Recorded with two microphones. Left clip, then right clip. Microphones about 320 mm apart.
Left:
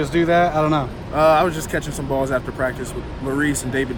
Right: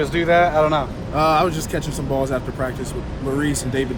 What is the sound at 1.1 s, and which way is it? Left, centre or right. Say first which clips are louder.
Speech: left 2 dB; centre.